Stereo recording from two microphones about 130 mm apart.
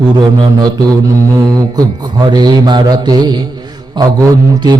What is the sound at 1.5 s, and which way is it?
Mantra, 30° right (ahead or behind).